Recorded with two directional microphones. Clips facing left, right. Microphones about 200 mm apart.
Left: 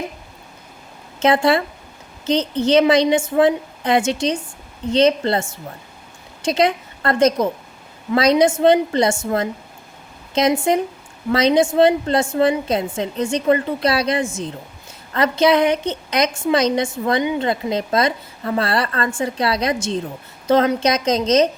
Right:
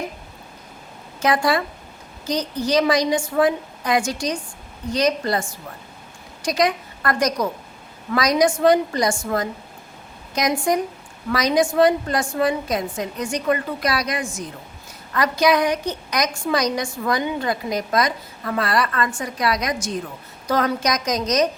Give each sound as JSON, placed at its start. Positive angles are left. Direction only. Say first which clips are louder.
{"t": 1.2, "sound": "a woman's voice", "louder": "left 4 dB", "side_deg": 25}